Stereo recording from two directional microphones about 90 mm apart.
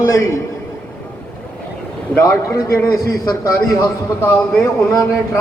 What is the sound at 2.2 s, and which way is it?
Speech, 35° left (ahead or behind).